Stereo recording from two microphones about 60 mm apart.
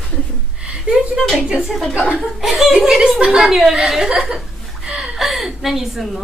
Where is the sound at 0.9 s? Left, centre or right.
Centre.